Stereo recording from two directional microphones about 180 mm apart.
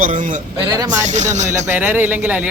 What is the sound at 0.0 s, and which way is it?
A man's voice, 45° right (ahead or behind).